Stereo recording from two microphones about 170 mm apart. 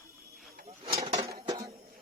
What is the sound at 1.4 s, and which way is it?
Music, 20° right (ahead or behind).